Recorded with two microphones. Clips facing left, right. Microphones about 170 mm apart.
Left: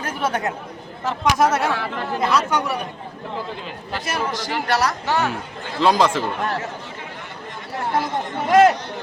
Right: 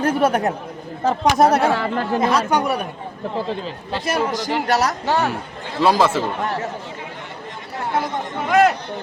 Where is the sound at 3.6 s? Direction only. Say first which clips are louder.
Right 4 dB; 35° right (ahead or behind).